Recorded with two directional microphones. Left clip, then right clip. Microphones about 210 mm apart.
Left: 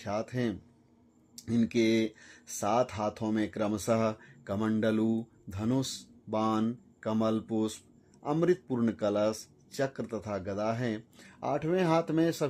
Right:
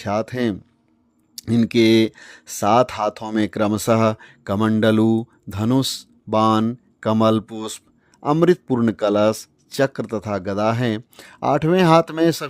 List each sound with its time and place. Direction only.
0.0 s speech: 40° right (ahead or behind)